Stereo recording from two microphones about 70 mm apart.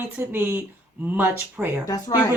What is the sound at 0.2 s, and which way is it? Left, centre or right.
Speech, right.